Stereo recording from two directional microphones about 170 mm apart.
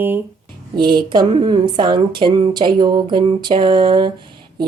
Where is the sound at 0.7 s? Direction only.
25° right (ahead or behind).